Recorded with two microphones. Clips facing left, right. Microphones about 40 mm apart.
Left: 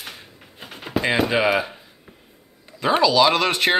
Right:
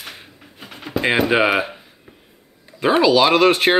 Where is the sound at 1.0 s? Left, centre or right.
Right.